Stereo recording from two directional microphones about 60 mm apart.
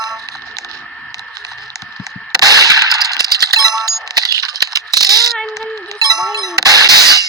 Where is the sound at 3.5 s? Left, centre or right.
Right.